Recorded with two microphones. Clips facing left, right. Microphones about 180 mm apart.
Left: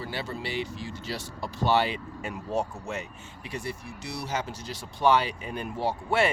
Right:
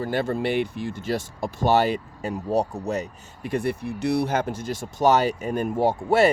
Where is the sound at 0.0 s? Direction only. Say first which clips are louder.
Right 10 dB; 50° right (ahead or behind).